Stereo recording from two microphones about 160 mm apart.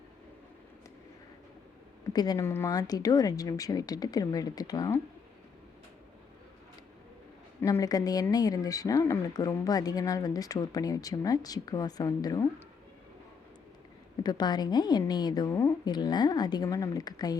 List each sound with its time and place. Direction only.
2.1 s speech: 25° left (ahead or behind)
7.6 s speech: 20° left (ahead or behind)
14.3 s speech: 25° left (ahead or behind)